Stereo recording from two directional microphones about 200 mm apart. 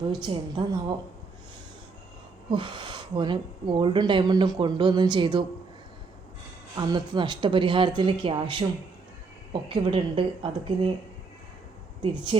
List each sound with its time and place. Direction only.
0.1 s speech: 20° right (ahead or behind)
2.5 s speech: 25° right (ahead or behind)
6.7 s speech: 20° right (ahead or behind)
12.3 s speech: 30° right (ahead or behind)